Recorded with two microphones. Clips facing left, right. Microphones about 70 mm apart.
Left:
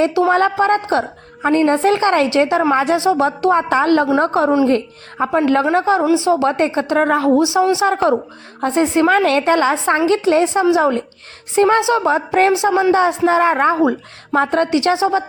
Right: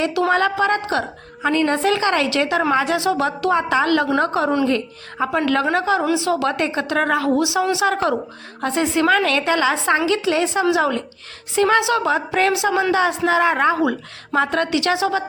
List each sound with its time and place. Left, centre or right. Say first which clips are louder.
0.3 s a woman's voice: left 4 dB; left
7.3 s a woman's voice: left 5 dB; left